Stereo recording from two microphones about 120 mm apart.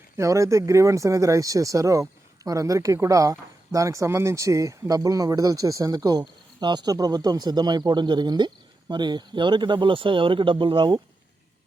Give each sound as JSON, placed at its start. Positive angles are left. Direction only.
{"t": 0.2, "sound": "speech", "side_deg": -25}